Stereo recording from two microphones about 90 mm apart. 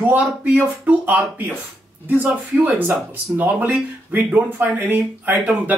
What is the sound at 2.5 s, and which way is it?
Speech, 20° right (ahead or behind).